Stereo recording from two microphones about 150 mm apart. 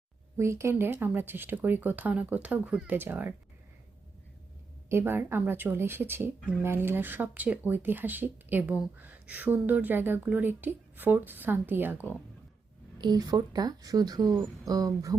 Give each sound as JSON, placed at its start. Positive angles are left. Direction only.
{"t": 0.3, "sound": "speech", "side_deg": -20}
{"t": 4.9, "sound": "speech", "side_deg": -15}
{"t": 13.0, "sound": "speech", "side_deg": -25}